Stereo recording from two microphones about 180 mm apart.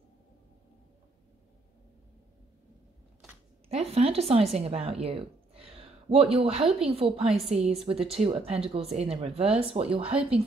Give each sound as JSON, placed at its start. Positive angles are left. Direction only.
{"t": 3.6, "sound": "speech", "side_deg": -35}